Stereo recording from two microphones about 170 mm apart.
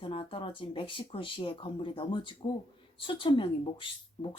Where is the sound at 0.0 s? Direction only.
30° left (ahead or behind).